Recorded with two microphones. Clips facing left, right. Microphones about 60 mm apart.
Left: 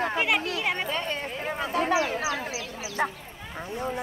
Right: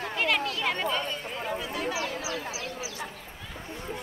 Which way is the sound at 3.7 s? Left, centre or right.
Left.